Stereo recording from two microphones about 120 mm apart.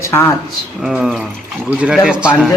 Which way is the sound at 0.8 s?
5° right (ahead or behind).